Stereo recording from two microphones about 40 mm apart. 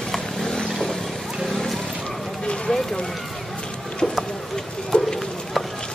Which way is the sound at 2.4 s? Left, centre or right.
Left.